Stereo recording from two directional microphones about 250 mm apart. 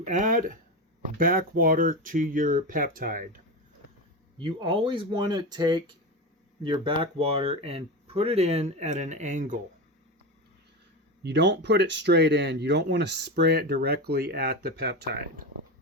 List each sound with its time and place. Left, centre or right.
0.0 s speech: right
4.4 s speech: centre
11.2 s speech: right